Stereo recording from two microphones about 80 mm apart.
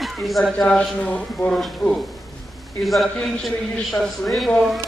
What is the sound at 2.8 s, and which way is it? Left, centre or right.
Speech, centre.